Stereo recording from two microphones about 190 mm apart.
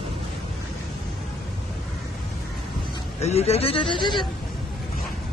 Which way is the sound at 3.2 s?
35° left (ahead or behind).